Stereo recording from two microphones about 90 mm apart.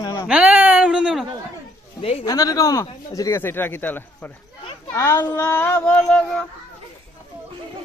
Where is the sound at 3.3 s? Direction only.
25° left (ahead or behind).